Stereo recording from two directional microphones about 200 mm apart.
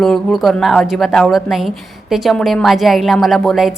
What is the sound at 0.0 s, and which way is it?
A woman's voice, centre (ahead or behind).